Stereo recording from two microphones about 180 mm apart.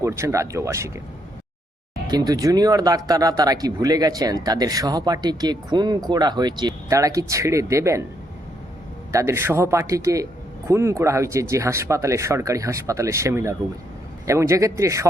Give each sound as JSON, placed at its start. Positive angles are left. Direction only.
{"t": 0.0, "sound": "speech", "side_deg": -15}
{"t": 2.0, "sound": "speech", "side_deg": -20}
{"t": 9.1, "sound": "speech", "side_deg": -15}